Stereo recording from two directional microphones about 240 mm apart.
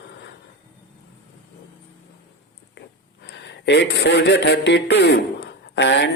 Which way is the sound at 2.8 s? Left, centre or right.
Left.